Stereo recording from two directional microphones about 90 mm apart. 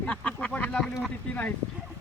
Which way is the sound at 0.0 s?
15° left (ahead or behind).